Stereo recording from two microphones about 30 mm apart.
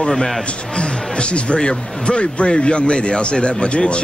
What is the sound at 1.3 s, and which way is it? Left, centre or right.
A man's voice, left.